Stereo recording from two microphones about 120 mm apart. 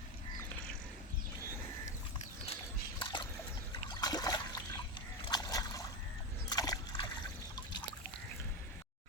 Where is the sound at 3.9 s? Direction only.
35° left (ahead or behind).